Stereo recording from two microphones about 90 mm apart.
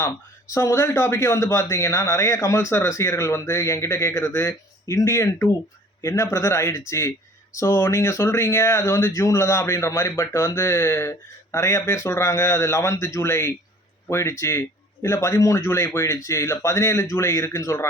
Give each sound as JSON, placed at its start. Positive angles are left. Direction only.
{"t": 0.0, "sound": "a man's voice", "side_deg": 35}